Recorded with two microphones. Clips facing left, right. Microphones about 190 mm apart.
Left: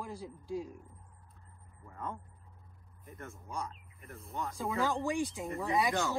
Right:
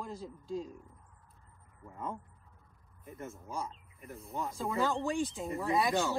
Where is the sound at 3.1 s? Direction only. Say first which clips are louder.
Right 1 dB; centre (ahead or behind).